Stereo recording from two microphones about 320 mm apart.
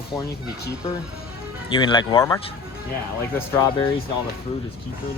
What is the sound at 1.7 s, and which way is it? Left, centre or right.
Speech, centre.